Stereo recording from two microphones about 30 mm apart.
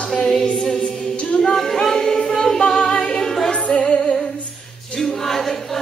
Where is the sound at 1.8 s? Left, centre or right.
Centre.